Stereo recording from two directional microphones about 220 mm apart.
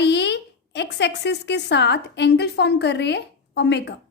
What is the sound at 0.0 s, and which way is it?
A woman's voice, 50° left (ahead or behind).